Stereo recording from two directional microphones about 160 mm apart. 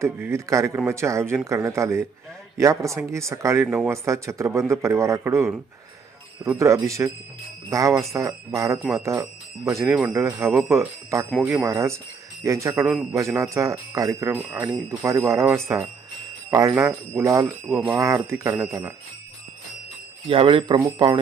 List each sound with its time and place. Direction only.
0.0 s speech: 15° right (ahead or behind)
6.6 s speech: 20° right (ahead or behind)
12.8 s a man's voice: 5° right (ahead or behind)
13.1 s speech: 20° right (ahead or behind)
20.2 s speech: 35° right (ahead or behind)